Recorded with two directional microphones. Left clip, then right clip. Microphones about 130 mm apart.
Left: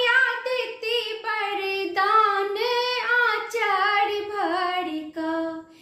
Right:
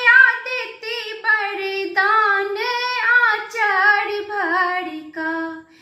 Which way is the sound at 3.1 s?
40° left (ahead or behind).